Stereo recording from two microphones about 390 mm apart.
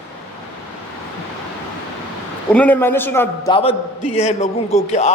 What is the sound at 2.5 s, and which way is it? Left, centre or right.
A man's voice, centre.